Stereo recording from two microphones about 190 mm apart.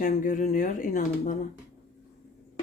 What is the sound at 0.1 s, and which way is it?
Speech, 45° left (ahead or behind).